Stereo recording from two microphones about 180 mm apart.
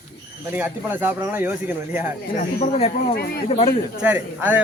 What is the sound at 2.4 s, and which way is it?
Speech, 40° left (ahead or behind).